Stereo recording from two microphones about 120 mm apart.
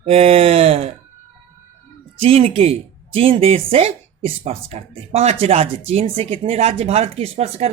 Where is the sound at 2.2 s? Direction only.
55° right (ahead or behind).